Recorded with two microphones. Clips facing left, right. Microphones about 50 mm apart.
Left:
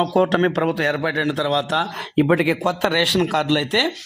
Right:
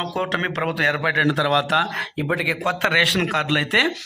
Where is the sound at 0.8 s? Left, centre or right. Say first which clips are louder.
Right 1 dB; right.